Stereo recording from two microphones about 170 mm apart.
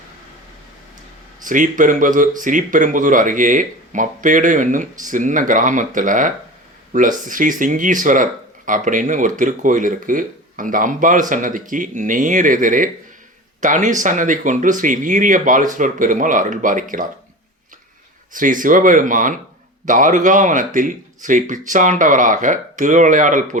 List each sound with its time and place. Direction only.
1.5 s speech: 50° right (ahead or behind)
18.3 s speech: 50° right (ahead or behind)